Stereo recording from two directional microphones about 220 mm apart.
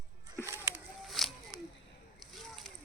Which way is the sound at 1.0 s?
Centre (ahead or behind).